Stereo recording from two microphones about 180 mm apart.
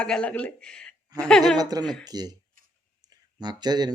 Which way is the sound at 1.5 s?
20° right (ahead or behind).